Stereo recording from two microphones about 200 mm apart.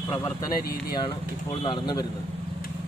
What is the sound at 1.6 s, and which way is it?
Speech, 20° left (ahead or behind).